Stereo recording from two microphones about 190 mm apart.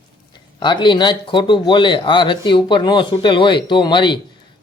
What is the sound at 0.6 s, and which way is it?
Speech, 25° left (ahead or behind).